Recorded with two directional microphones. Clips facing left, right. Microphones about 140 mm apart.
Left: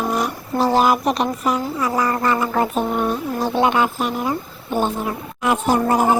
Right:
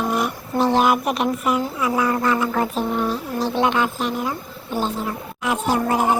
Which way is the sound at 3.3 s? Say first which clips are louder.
Left 1 dB; 45° left (ahead or behind).